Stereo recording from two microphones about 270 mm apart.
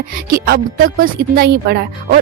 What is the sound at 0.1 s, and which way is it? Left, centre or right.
A woman's voice, right.